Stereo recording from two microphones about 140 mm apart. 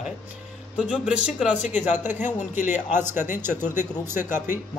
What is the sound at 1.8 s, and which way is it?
Speech, 55° left (ahead or behind).